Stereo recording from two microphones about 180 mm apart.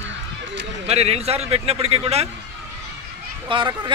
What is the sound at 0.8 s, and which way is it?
A man's voice, 35° right (ahead or behind).